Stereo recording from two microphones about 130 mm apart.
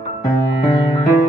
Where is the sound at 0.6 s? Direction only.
40° left (ahead or behind).